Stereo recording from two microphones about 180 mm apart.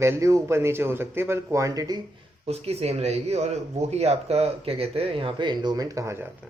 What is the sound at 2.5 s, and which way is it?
Speech, 35° right (ahead or behind).